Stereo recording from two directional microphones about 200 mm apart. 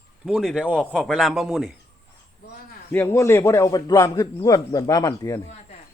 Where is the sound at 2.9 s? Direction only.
10° left (ahead or behind).